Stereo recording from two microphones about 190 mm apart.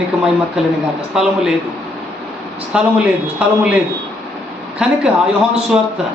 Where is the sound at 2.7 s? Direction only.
5° right (ahead or behind).